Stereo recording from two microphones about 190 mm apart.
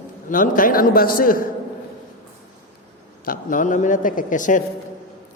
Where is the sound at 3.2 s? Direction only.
45° left (ahead or behind).